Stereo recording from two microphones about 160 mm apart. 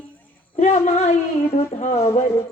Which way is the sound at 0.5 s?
45° left (ahead or behind).